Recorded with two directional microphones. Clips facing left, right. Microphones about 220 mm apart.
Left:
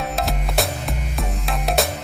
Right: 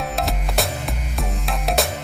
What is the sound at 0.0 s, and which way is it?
Music, centre (ahead or behind).